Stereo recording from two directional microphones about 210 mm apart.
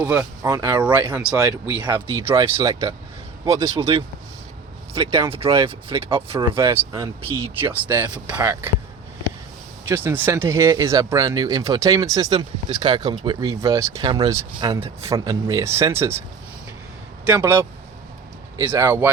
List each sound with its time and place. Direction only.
0.0 s speech: 10° right (ahead or behind)
1.0 s speech: 5° right (ahead or behind)
5.3 s speech: 25° right (ahead or behind)
6.7 s speech: 15° right (ahead or behind)
9.9 s speech: 10° right (ahead or behind)
17.2 s speech: 10° right (ahead or behind)